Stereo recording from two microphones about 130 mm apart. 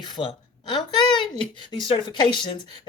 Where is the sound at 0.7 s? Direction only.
35° left (ahead or behind).